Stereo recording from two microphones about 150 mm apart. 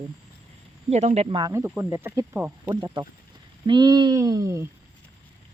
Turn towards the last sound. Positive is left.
turn(degrees=-20)  # may be behind; listen again after turning